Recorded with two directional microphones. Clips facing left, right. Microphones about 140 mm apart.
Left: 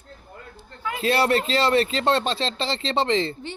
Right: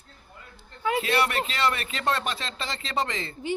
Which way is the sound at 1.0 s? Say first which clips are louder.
Left 9 dB; 30° left (ahead or behind).